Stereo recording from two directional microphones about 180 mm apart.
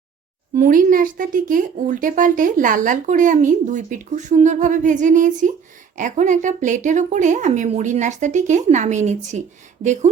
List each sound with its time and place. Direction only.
0.5 s speech: 45° right (ahead or behind)